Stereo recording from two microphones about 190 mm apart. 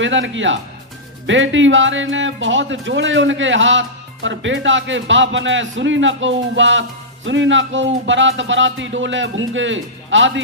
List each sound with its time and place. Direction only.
0.0 s speech: 80° right